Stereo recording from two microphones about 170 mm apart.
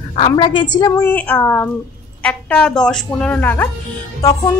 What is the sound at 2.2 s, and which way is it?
Music, 5° left (ahead or behind).